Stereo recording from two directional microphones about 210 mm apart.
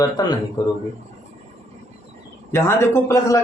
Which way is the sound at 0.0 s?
20° left (ahead or behind).